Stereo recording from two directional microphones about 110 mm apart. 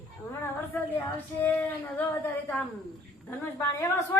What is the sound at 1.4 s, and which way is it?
Speech, 15° left (ahead or behind).